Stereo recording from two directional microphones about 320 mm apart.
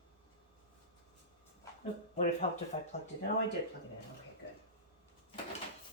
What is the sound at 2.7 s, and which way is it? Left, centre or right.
Speech, left.